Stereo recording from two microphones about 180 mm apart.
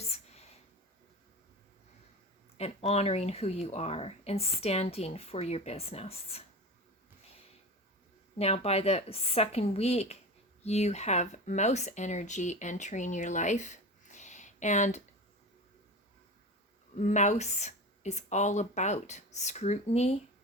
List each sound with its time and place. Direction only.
0.1 s a sound: 35° left (ahead or behind)
2.6 s speech: 35° left (ahead or behind)
8.4 s speech: 35° left (ahead or behind)
16.9 s speech: 40° left (ahead or behind)